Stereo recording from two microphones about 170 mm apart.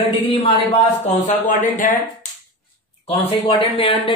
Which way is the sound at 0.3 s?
35° left (ahead or behind).